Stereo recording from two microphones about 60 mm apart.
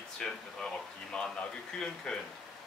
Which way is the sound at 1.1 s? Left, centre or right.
Centre.